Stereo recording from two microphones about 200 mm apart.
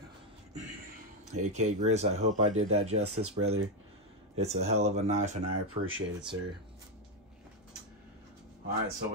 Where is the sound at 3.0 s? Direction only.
90° right.